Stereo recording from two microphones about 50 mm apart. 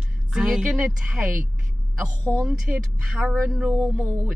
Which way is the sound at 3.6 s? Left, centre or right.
Centre.